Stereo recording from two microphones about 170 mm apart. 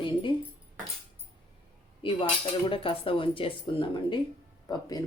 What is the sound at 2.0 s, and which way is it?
Speech, 30° left (ahead or behind).